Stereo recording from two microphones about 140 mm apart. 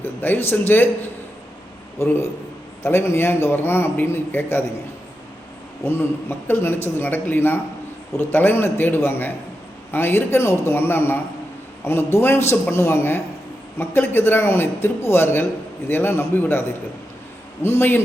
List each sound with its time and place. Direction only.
0.0 s a man's voice: 15° left (ahead or behind)
5.8 s a man's voice: 15° left (ahead or behind)